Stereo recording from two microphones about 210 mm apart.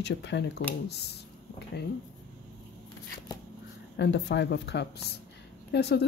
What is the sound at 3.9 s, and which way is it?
Speech, 55° left (ahead or behind).